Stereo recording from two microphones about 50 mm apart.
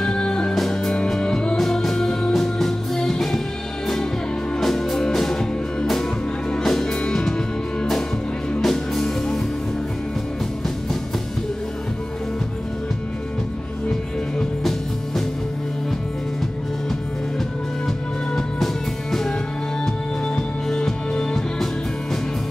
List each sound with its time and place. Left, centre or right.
0.0 s music: centre
1.6 s music: centre
4.6 s music: centre
8.5 s music: centre
20.7 s music: centre